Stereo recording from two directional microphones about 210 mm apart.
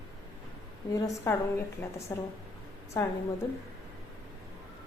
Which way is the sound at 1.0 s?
15° left (ahead or behind).